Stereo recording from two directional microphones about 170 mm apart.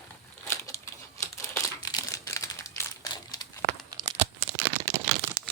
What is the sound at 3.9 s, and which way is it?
Tearing, 25° right (ahead or behind).